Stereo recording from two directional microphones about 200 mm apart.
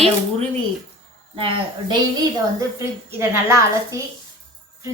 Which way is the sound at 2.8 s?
15° right (ahead or behind).